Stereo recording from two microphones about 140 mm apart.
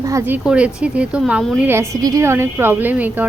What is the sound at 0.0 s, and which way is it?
Speech, 20° right (ahead or behind).